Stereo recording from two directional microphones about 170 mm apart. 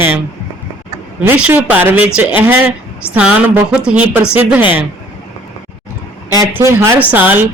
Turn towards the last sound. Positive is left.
turn(degrees=-10)  # may be behind; listen again after turning